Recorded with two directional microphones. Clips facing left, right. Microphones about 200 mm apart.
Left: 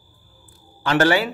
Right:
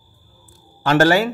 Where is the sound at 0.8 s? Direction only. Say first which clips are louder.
Right 3 dB; 45° right (ahead or behind).